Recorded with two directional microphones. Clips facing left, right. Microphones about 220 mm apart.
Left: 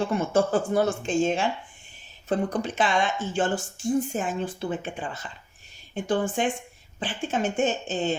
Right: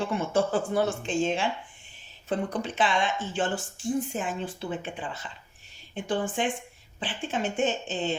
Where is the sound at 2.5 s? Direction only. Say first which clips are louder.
Left 2 dB; 45° left (ahead or behind).